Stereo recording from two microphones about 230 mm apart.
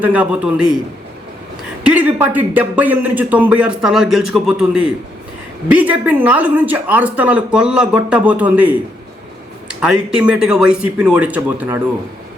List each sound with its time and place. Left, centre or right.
0.0 s a man's voice: centre
1.8 s a man's voice: centre